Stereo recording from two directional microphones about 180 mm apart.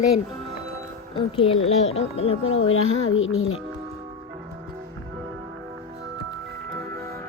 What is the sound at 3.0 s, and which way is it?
Speech, 90° left.